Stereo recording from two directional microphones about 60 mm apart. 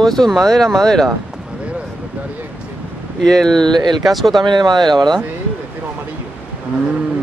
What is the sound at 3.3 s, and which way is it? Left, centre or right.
Speech, centre.